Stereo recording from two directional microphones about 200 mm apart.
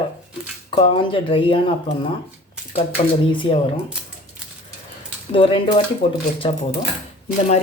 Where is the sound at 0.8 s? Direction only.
25° left (ahead or behind).